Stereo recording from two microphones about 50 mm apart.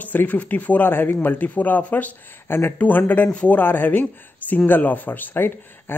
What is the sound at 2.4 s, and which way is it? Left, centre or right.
Speech, left.